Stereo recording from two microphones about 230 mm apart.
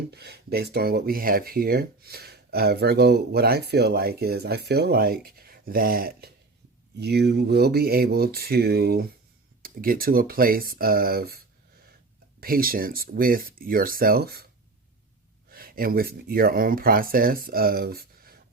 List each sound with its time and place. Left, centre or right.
0.1 s speech: right
15.4 s speech: right